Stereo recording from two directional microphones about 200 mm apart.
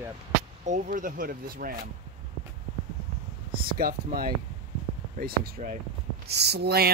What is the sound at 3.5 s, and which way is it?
Speech, 50° right (ahead or behind).